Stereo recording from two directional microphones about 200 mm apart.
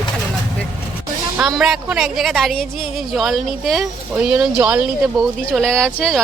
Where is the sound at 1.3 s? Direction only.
Centre (ahead or behind).